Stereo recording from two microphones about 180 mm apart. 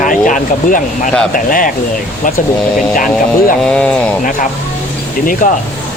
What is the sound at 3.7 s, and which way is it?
Speech, 5° left (ahead or behind).